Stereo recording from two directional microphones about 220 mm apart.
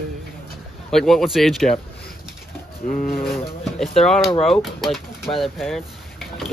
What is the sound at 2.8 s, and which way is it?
Speech, 35° left (ahead or behind).